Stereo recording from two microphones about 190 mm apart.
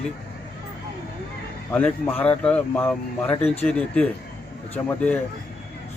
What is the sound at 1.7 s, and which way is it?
Speech, 10° left (ahead or behind).